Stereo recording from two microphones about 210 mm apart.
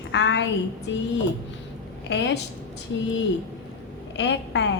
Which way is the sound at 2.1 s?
55° left (ahead or behind).